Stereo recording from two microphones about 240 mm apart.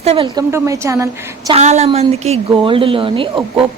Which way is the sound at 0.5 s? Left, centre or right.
Centre.